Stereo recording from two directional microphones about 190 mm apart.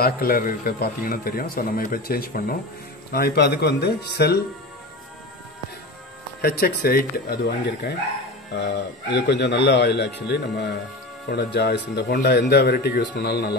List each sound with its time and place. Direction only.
0.0 s speech: 50° left (ahead or behind)
6.4 s speech: 55° left (ahead or behind)